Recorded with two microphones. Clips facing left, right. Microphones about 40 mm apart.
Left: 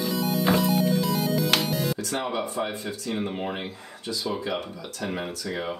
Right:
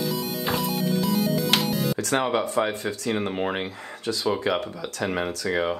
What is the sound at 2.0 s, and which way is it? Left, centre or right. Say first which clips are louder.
Speech: right 5 dB; right.